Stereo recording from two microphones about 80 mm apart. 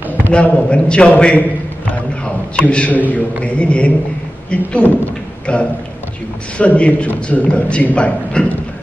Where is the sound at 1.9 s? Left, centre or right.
Centre.